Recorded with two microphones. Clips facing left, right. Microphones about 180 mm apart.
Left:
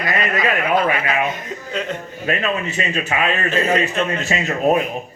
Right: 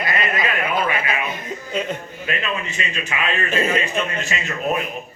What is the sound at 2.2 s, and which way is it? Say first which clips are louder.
A man's voice: left 5 dB; 40° left (ahead or behind).